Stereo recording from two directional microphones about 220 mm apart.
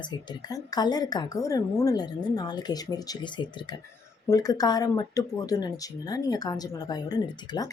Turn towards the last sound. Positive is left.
turn(degrees=20)  # may be behind; listen again after turning